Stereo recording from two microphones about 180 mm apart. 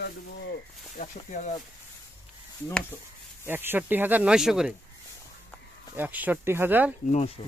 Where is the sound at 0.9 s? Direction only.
45° left (ahead or behind).